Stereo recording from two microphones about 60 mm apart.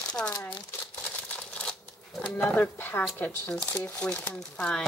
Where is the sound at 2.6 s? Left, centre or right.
Left.